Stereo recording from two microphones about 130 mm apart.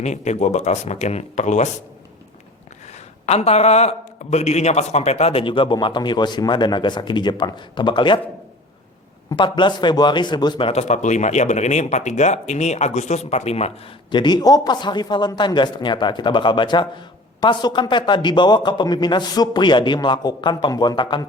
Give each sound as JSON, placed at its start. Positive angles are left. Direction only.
{"t": 0.0, "sound": "speech", "side_deg": 60}
{"t": 3.2, "sound": "a man's voice", "side_deg": 55}
{"t": 9.3, "sound": "a man's voice", "side_deg": 35}
{"t": 10.7, "sound": "speech", "side_deg": 60}
{"t": 14.1, "sound": "a man's voice", "side_deg": 35}